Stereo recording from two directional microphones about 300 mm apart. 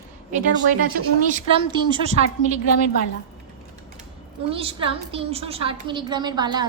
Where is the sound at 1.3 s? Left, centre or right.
Centre.